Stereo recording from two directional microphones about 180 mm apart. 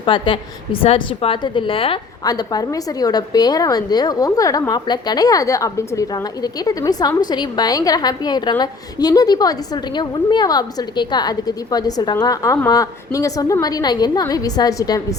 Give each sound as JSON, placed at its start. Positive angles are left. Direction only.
{"t": 0.0, "sound": "a woman's voice", "side_deg": 30}